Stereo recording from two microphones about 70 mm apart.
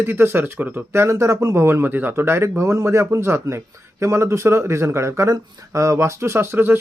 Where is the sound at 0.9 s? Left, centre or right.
Right.